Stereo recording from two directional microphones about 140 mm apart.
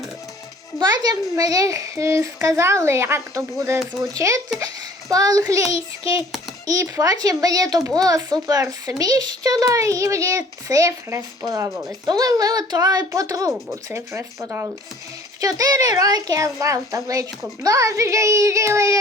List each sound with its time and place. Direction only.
0.8 s a child's voice: 30° right (ahead or behind)
6.7 s speech: 25° right (ahead or behind)
15.4 s speech: 25° right (ahead or behind)